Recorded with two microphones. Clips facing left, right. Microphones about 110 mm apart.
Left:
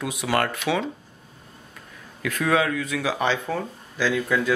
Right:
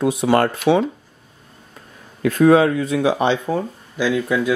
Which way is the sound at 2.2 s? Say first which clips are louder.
Right 9 dB; 30° right (ahead or behind).